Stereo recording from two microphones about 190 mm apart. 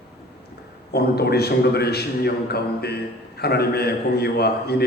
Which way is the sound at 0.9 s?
55° left (ahead or behind).